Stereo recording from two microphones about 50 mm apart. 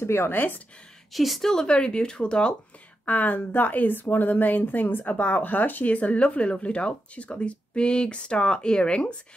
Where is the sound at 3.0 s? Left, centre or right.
Left.